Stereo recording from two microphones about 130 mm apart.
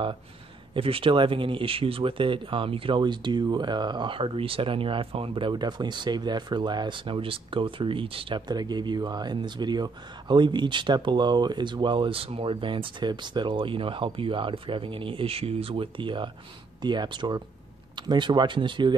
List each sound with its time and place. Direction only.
0.7 s speech: 45° right (ahead or behind)
8.4 s speech: 30° right (ahead or behind)